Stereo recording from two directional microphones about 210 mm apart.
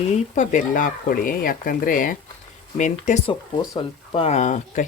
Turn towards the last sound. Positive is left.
turn(degrees=35)  # may be behind; listen again after turning